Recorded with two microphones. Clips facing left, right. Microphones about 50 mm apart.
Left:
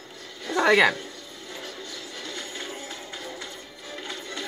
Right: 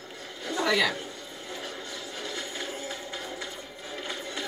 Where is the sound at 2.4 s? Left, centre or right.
Centre.